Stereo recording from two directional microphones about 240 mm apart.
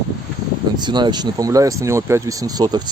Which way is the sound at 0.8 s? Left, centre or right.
Centre.